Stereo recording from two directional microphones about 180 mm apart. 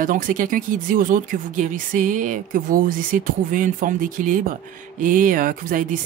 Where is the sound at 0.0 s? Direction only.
50° right (ahead or behind).